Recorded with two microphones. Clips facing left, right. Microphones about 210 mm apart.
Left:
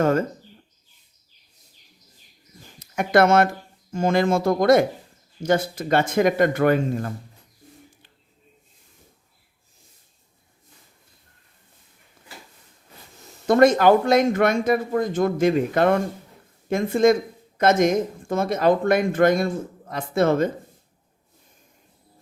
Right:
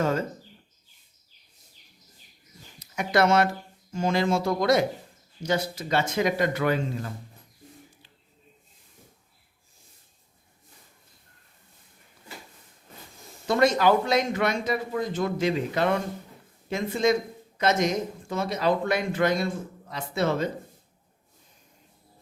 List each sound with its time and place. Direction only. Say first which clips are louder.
0.0 s speech: left 6 dB; 50° left (ahead or behind)
2.7 s speech: left 6 dB; 50° left (ahead or behind)
13.5 s speech: left 6 dB; 50° left (ahead or behind)